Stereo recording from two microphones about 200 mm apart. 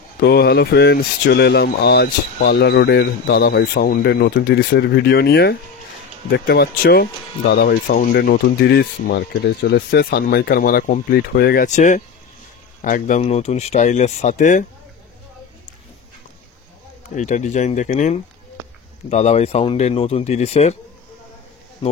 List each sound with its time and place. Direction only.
0.2 s speech: 55° left (ahead or behind)
17.1 s speech: 35° left (ahead or behind)